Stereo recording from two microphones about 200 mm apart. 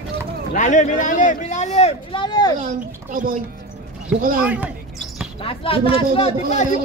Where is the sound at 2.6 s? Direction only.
40° right (ahead or behind).